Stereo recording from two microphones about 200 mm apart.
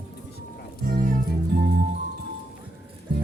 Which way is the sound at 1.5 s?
55° right (ahead or behind).